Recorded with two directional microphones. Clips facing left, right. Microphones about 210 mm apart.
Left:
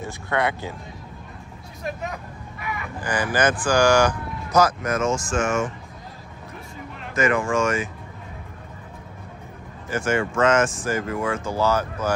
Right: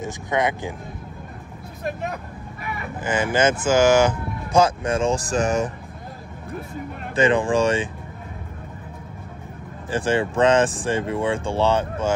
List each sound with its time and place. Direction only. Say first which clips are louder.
0.0 s speech: right 2 dB; 15° right (ahead or behind)
3.0 s speech: right 2 dB; 25° right (ahead or behind)
7.2 s speech: right 3 dB; 30° right (ahead or behind)
9.8 s speech: right 2 dB; 30° right (ahead or behind)